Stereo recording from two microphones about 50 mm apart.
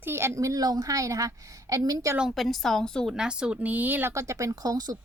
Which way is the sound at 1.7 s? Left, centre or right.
Right.